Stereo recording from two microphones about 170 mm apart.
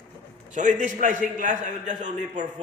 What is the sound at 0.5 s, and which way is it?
A man's voice, 50° right (ahead or behind).